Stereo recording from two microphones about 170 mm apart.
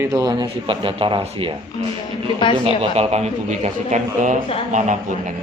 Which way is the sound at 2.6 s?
35° right (ahead or behind).